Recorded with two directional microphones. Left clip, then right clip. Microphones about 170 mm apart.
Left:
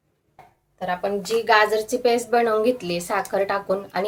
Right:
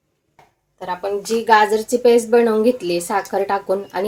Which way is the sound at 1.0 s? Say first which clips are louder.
Right 3 dB; 45° right (ahead or behind).